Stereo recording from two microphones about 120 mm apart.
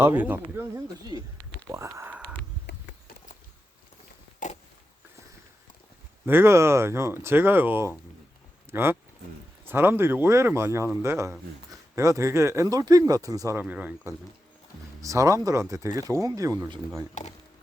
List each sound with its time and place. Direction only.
0.0 s speech: 15° right (ahead or behind)
1.1 s speech: 25° right (ahead or behind)
4.4 s a sound: 90° left
6.2 s speech: 20° right (ahead or behind)
13.6 s speech: 10° right (ahead or behind)
15.0 s speech: 25° right (ahead or behind)
17.2 s speech: 90° left